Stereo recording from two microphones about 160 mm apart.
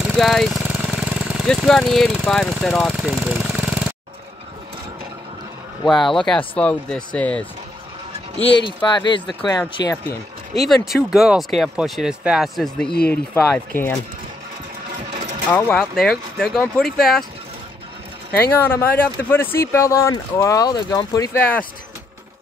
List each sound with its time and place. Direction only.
0.0 s speech: centre (ahead or behind)
0.6 s vehicle: 5° right (ahead or behind)
5.9 s speech: centre (ahead or behind)
8.4 s speech: 30° left (ahead or behind)
10.6 s speech: centre (ahead or behind)
15.5 s speech: 5° left (ahead or behind)
18.6 s speech: 15° left (ahead or behind)